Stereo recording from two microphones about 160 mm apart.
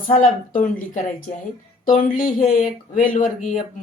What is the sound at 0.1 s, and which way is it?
Speech, 55° left (ahead or behind).